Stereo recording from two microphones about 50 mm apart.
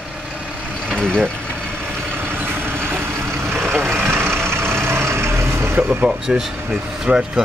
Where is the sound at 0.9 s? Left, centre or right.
Centre.